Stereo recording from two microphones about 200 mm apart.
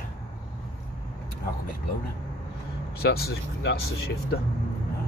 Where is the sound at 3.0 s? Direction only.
50° left (ahead or behind).